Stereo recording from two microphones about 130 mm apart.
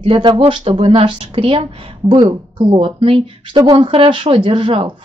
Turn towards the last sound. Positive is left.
turn(degrees=-45)  # may be behind; listen again after turning